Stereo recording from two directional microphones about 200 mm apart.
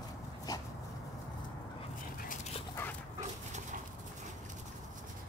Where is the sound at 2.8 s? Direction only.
10° left (ahead or behind).